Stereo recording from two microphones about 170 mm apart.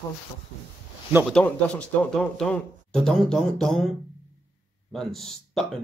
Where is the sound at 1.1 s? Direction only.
10° right (ahead or behind).